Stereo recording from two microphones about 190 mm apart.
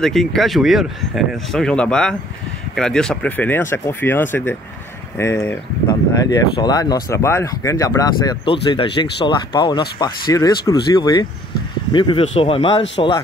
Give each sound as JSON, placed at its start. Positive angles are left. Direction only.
{"t": 0.0, "sound": "speech", "side_deg": 0}